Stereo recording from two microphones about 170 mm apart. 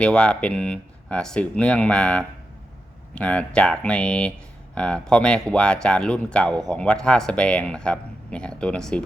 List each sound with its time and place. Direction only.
0.0 s speech: 5° left (ahead or behind)